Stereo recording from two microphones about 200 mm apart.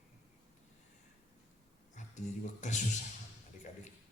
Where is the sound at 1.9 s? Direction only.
35° left (ahead or behind).